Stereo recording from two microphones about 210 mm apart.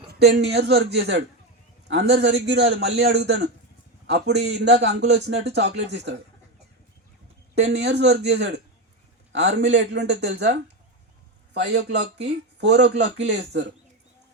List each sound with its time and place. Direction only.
0.1 s a man's voice: 55° right (ahead or behind)
7.7 s speech: 55° right (ahead or behind)
11.5 s speech: 55° right (ahead or behind)